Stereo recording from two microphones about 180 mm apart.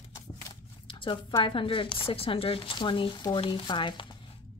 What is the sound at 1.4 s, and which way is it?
Speech, 30° left (ahead or behind).